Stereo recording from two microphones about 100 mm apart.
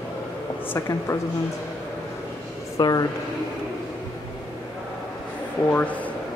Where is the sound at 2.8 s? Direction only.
40° left (ahead or behind).